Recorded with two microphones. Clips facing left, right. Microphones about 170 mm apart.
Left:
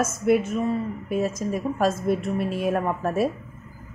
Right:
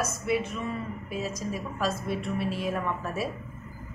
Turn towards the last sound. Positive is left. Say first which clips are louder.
# left 7 dB
turn(degrees=50)  # may be behind; listen again after turning